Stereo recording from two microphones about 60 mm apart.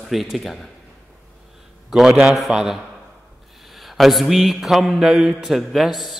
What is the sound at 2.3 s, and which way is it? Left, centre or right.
Speech, centre.